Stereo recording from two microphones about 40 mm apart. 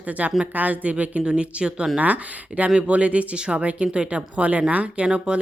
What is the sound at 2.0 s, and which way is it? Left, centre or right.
Speech, right.